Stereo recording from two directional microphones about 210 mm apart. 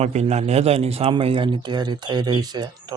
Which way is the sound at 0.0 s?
30° right (ahead or behind).